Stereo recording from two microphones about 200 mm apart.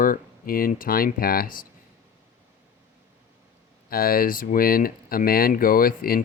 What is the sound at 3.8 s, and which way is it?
Speech, 50° left (ahead or behind).